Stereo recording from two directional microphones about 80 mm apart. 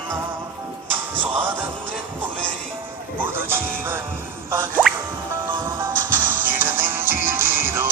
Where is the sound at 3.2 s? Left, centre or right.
Right.